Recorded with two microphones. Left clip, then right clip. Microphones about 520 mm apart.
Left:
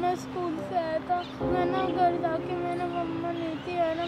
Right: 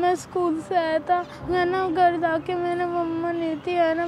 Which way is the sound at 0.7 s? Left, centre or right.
Right.